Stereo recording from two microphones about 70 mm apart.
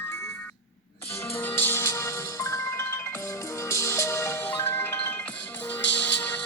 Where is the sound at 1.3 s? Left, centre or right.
Left.